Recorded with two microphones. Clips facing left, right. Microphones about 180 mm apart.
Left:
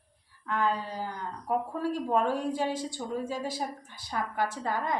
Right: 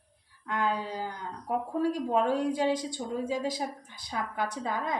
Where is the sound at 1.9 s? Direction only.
15° right (ahead or behind).